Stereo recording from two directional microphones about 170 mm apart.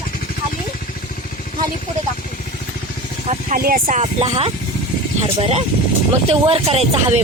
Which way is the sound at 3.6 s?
60° right (ahead or behind).